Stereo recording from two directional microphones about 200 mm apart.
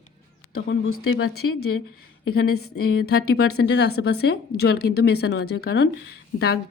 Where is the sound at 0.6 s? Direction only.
70° left (ahead or behind); by 1.8 s 90° left.